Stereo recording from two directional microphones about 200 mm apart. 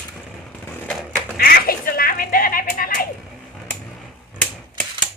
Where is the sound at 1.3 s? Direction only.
50° left (ahead or behind).